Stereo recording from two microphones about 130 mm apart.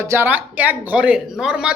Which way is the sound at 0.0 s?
20° right (ahead or behind).